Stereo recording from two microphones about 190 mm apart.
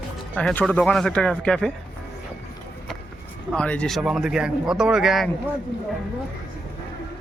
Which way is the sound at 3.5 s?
5° left (ahead or behind).